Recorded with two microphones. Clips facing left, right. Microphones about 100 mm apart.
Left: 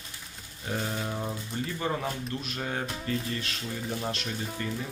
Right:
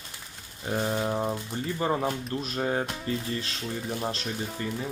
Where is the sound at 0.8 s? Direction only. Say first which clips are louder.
Right 7 dB; 30° right (ahead or behind).